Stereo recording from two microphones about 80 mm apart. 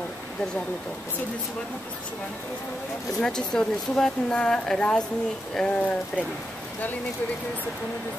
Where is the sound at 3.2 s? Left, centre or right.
Centre.